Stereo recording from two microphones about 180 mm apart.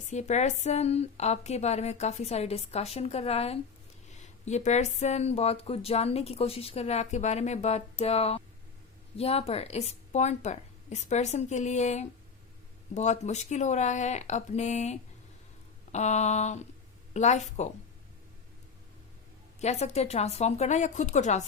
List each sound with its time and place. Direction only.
0.1 s speech: 40° left (ahead or behind)
19.5 s speech: 40° left (ahead or behind)